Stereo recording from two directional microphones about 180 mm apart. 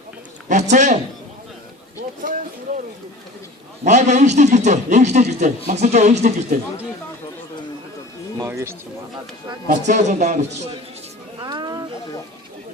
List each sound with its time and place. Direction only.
0.4 s speech: 45° right (ahead or behind)
2.2 s speech: 45° right (ahead or behind)
3.8 s a man's voice: 40° right (ahead or behind)
8.4 s speech: 15° right (ahead or behind)
9.6 s a man's voice: 40° right (ahead or behind)
11.3 s a sound: 25° right (ahead or behind)